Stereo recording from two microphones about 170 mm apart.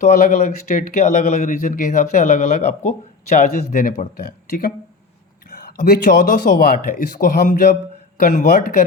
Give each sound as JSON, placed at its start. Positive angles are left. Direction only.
{"t": 0.0, "sound": "speech", "side_deg": 45}